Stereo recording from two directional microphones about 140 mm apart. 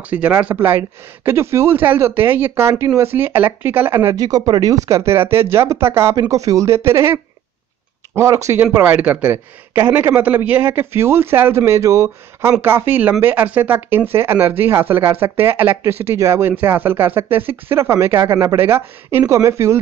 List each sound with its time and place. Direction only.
0.1 s a man's voice: 10° right (ahead or behind)